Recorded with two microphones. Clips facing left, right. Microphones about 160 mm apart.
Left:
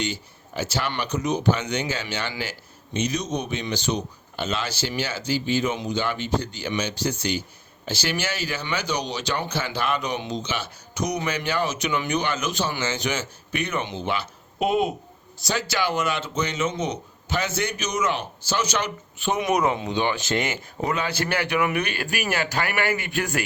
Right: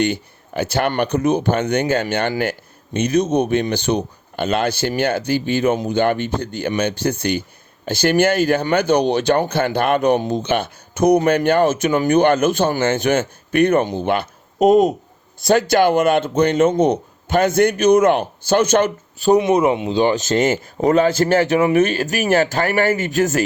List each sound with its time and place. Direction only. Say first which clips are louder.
0.0 s speech: right 10 dB; 60° right (ahead or behind); by 14.9 s 40° right (ahead or behind)
15.4 s speech: right 12 dB; 55° right (ahead or behind)
19.2 s speech: right 8 dB; 30° right (ahead or behind)